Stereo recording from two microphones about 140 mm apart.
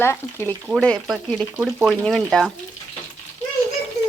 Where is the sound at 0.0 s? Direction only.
15° left (ahead or behind).